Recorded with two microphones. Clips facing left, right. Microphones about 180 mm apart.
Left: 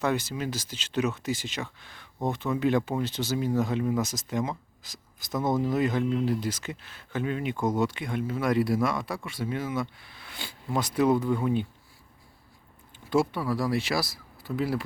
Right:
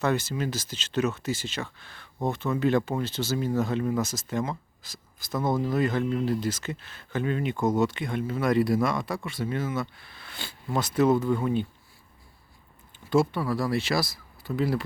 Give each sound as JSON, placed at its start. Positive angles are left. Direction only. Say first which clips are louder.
{"t": 0.0, "sound": "speech", "louder": "right 1 dB", "side_deg": 10}
{"t": 13.1, "sound": "speech", "louder": "right 2 dB", "side_deg": 10}